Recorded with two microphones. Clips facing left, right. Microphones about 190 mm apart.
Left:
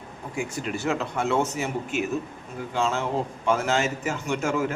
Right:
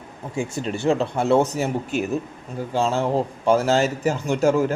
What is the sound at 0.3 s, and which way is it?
A man's voice, 25° right (ahead or behind).